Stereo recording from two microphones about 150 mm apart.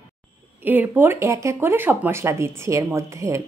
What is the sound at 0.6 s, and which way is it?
Speech, 15° right (ahead or behind).